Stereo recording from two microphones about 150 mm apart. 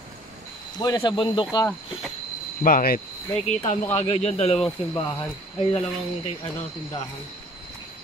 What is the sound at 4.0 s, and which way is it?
Speech, 45° left (ahead or behind).